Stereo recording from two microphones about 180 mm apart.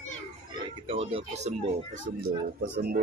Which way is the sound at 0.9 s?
30° right (ahead or behind).